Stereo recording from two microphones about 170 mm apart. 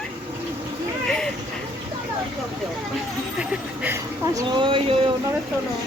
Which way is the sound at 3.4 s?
10° right (ahead or behind).